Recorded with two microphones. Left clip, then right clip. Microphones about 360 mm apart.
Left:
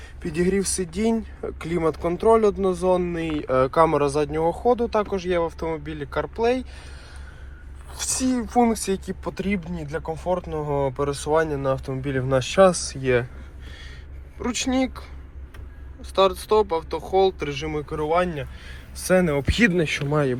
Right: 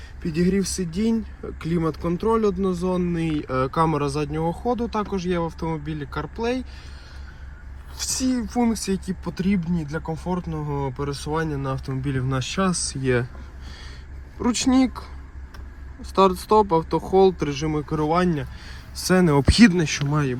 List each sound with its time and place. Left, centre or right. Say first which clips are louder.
0.2 s speech: left 1 dB; centre
7.9 s speech: even; centre
14.3 s speech: right 3 dB; centre
16.1 s speech: right 1 dB; centre